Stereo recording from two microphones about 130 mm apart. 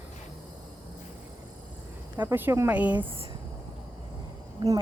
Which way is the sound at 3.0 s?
45° right (ahead or behind).